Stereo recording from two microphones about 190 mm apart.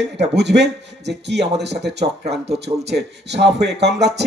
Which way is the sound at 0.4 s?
65° right (ahead or behind).